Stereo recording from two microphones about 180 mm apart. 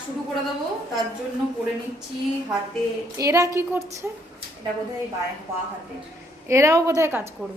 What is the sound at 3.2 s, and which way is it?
Speech, 15° right (ahead or behind).